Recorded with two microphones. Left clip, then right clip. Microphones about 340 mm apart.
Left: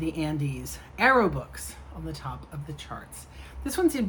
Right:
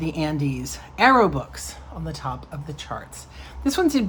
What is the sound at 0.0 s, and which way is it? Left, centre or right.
Speech, right.